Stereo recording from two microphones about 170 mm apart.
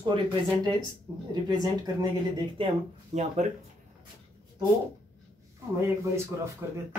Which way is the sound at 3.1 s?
40° right (ahead or behind).